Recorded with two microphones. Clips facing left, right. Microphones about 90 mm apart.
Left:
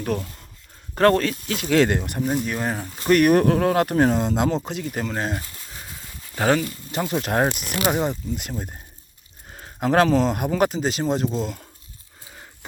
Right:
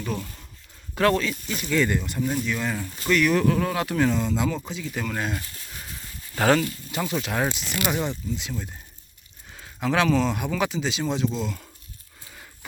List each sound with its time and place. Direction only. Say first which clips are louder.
0.9 s speech: left 4 dB; 45° left (ahead or behind)
1.3 s speech: left 5 dB; 75° left (ahead or behind)
2.0 s speech: left 3 dB; 50° left (ahead or behind); by 3.1 s 35° left (ahead or behind)
3.1 s speech: left 5 dB; 50° left (ahead or behind)
5.0 s speech: left 1 dB; 30° left (ahead or behind)
6.3 s speech: even; 15° left (ahead or behind)
6.9 s speech: left 3 dB; 30° left (ahead or behind)
7.2 s speech: left 7 dB; 45° left (ahead or behind)
7.8 s speech: left 4 dB; 35° left (ahead or behind)